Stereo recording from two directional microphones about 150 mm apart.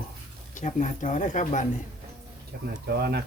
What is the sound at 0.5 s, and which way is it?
Speech, 55° left (ahead or behind).